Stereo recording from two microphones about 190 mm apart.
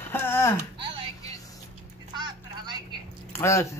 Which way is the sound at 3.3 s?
15° left (ahead or behind).